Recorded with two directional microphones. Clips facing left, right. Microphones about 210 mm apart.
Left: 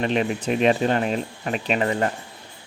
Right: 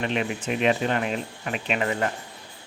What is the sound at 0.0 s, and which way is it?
Speech, 35° left (ahead or behind).